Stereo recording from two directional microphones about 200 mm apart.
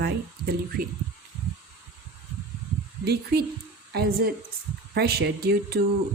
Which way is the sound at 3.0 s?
55° right (ahead or behind).